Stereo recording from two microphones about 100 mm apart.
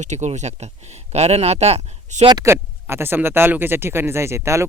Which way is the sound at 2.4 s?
25° right (ahead or behind).